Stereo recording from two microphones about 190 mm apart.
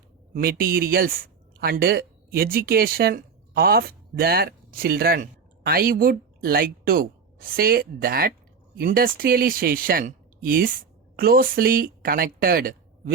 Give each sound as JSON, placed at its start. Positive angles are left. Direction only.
{"t": 0.3, "sound": "speech", "side_deg": -50}